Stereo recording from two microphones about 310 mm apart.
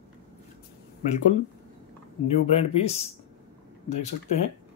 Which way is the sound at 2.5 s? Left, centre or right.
Centre.